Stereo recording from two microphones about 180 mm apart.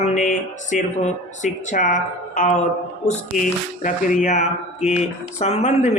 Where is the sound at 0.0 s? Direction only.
40° left (ahead or behind).